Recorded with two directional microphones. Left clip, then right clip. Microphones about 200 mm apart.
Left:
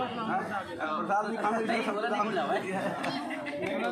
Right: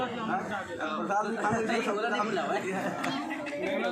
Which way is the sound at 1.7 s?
10° left (ahead or behind).